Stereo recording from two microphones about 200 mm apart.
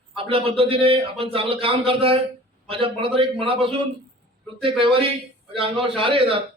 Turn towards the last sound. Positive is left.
turn(degrees=-25)  # may be behind; listen again after turning